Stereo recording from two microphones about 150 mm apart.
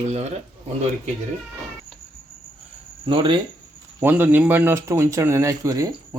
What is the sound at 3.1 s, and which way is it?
Speech, 35° right (ahead or behind).